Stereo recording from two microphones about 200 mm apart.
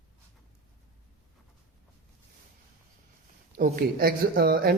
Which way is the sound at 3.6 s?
45° right (ahead or behind).